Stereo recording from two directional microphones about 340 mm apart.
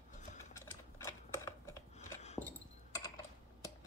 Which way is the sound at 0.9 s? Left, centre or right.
Centre.